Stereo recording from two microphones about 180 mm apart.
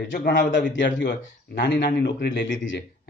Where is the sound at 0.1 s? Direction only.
70° left (ahead or behind).